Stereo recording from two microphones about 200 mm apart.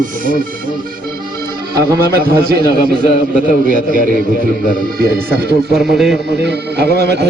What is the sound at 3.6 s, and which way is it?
Speech, 45° right (ahead or behind).